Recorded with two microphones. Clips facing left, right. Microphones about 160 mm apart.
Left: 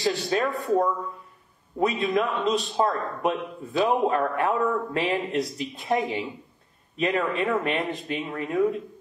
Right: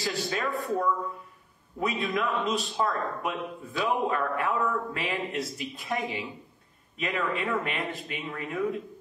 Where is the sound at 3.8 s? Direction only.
40° left (ahead or behind).